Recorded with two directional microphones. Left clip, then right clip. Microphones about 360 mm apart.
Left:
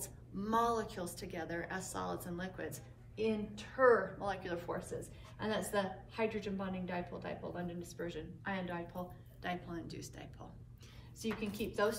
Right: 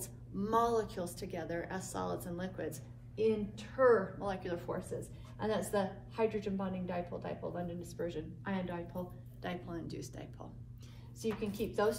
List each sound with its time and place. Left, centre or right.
0.0 s a woman's voice: centre